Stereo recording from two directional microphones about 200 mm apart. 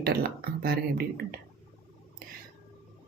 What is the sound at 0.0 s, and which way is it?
Speech, 50° right (ahead or behind).